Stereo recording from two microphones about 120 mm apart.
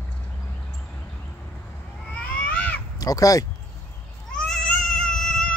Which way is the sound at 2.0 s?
15° left (ahead or behind).